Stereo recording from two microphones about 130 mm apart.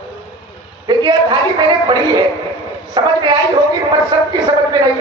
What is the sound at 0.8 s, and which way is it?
A woman's voice, 35° right (ahead or behind).